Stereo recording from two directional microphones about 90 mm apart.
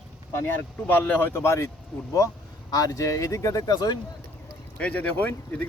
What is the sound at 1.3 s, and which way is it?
Speech, 30° left (ahead or behind).